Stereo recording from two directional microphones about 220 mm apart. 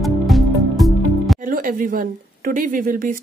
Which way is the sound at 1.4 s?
35° right (ahead or behind).